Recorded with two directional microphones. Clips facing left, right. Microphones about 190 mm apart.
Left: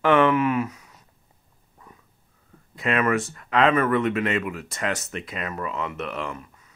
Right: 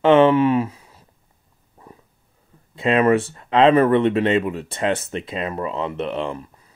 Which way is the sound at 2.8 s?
30° right (ahead or behind).